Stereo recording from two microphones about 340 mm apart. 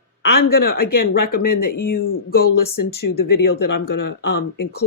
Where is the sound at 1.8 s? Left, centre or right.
Left.